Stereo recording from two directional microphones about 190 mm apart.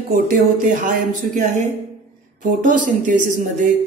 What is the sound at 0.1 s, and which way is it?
Speech, 45° right (ahead or behind).